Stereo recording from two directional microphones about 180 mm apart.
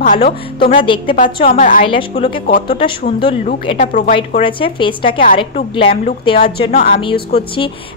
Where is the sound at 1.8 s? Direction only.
30° left (ahead or behind).